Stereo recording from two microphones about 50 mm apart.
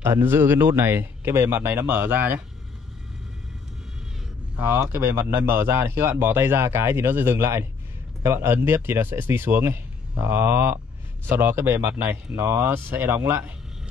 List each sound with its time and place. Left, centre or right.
0.0 s speech: right
4.9 s speech: right